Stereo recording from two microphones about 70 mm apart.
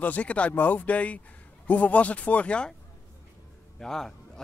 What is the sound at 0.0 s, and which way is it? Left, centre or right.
Speech, left.